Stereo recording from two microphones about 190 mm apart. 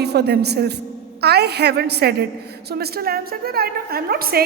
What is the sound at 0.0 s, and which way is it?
A woman's voice, 60° right (ahead or behind).